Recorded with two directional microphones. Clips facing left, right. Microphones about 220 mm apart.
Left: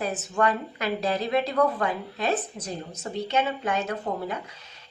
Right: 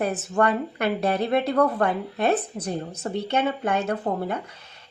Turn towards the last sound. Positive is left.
turn(degrees=-55)  # may be behind; listen again after turning